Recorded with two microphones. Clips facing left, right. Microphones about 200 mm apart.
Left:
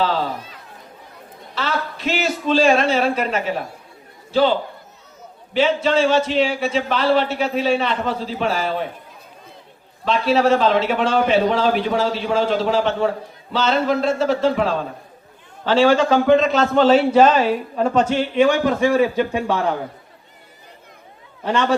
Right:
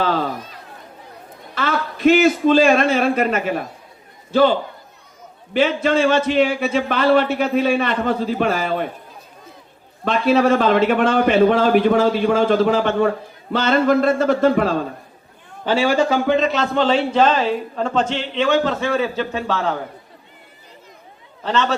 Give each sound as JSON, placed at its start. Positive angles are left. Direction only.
{"t": 0.0, "sound": "chatter", "side_deg": -50}
{"t": 1.5, "sound": "a man's voice", "side_deg": -50}
{"t": 5.5, "sound": "a man's voice", "side_deg": -50}
{"t": 10.0, "sound": "a man's voice", "side_deg": -50}
{"t": 15.6, "sound": "a man's voice", "side_deg": -10}
{"t": 21.4, "sound": "a man's voice", "side_deg": 10}